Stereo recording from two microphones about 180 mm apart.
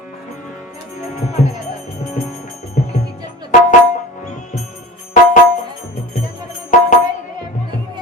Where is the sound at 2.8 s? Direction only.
45° left (ahead or behind).